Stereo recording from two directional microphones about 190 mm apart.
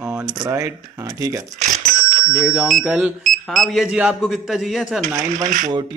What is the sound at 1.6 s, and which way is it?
Bicycle bell, 40° right (ahead or behind).